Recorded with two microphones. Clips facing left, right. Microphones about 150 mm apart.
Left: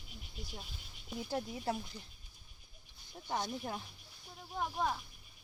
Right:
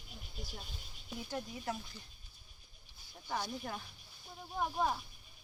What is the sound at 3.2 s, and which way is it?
Speech, 25° left (ahead or behind).